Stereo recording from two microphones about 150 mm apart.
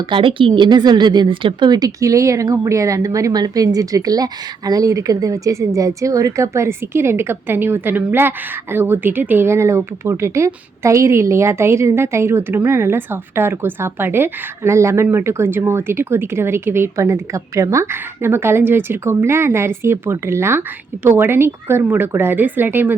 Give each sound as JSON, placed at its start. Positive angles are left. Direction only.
{"t": 0.1, "sound": "speech", "side_deg": -35}